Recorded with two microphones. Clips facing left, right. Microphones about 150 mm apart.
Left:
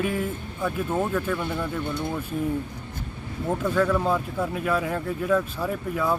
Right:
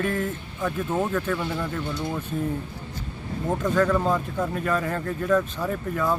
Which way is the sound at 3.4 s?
5° left (ahead or behind).